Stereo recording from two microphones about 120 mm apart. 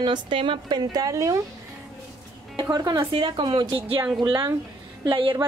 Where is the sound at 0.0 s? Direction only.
45° right (ahead or behind); by 1.4 s 25° right (ahead or behind).